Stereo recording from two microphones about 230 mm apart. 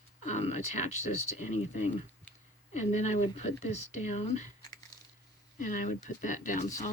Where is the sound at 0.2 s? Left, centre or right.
Left.